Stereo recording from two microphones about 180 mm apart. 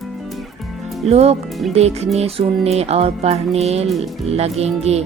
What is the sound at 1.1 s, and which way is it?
Music, 35° right (ahead or behind).